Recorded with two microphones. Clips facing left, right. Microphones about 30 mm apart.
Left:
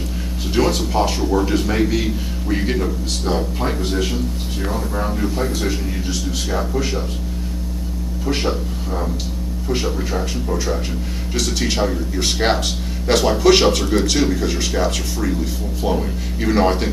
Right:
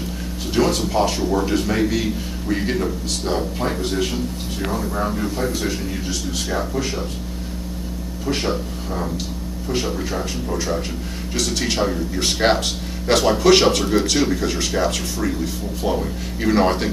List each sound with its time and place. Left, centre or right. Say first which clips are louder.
0.5 s a man's voice: left 1 dB; centre
8.3 s a man's voice: left 1 dB; centre